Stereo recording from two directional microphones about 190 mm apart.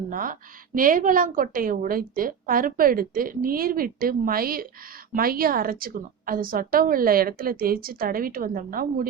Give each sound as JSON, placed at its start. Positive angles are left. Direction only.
{"t": 0.1, "sound": "a woman's voice", "side_deg": -45}